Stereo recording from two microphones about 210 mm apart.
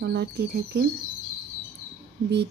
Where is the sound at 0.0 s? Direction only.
50° right (ahead or behind).